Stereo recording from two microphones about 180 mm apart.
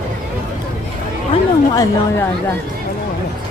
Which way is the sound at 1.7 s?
20° left (ahead or behind).